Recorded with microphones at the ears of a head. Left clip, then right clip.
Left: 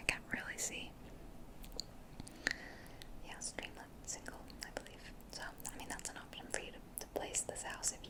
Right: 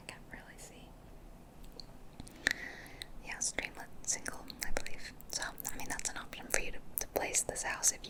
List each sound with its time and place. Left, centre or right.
0.0 s whispering: left
2.4 s whispering: right